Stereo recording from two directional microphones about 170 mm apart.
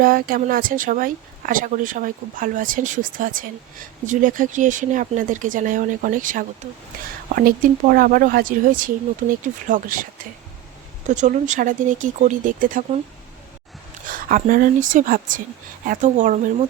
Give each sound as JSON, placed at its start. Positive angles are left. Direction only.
{"t": 0.0, "sound": "speech", "side_deg": -55}
{"t": 14.1, "sound": "speech", "side_deg": -50}